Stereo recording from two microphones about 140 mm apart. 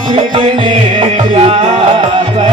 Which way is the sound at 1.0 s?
40° right (ahead or behind).